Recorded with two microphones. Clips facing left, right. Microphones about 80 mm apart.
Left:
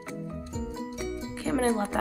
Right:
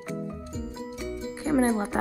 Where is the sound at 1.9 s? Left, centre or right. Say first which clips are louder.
Right 1 dB; right.